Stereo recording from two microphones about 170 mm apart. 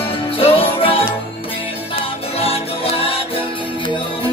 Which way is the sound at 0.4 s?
35° left (ahead or behind).